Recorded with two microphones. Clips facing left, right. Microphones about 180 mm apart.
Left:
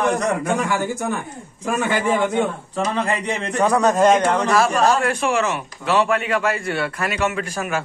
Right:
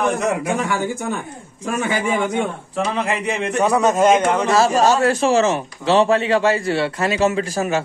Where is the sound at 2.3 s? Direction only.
10° right (ahead or behind).